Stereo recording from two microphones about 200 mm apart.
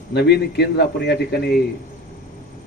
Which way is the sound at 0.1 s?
55° left (ahead or behind).